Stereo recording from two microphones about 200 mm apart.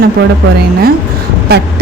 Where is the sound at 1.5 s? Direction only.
55° right (ahead or behind).